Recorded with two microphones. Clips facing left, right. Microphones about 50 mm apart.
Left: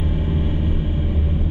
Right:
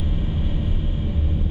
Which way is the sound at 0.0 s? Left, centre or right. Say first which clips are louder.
Left 4 dB; centre.